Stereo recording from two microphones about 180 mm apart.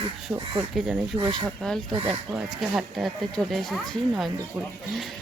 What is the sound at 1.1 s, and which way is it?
Speech, 20° right (ahead or behind).